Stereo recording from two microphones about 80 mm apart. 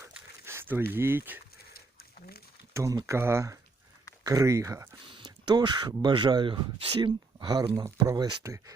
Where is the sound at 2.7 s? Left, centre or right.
Right.